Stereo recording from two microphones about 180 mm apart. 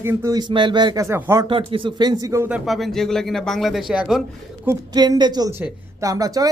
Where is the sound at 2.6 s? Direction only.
Centre (ahead or behind).